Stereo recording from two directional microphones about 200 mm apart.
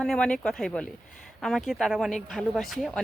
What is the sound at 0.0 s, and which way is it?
Speech, 5° left (ahead or behind).